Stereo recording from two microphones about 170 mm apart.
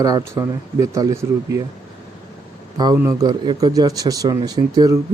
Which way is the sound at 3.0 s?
20° right (ahead or behind).